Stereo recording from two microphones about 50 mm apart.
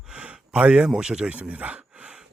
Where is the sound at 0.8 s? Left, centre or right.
Centre.